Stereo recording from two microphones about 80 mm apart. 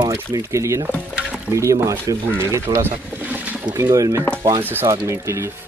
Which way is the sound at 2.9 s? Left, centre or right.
Right.